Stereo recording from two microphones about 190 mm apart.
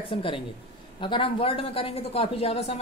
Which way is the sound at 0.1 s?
30° left (ahead or behind).